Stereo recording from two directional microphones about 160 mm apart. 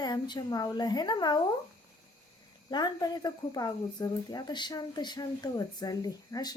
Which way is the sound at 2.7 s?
25° left (ahead or behind).